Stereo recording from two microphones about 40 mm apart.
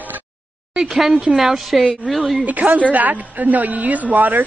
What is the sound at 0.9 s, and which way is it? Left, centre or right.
A woman's voice, centre.